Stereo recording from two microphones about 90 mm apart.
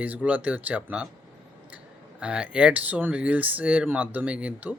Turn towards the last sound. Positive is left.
turn(degrees=-15)  # may be behind; listen again after turning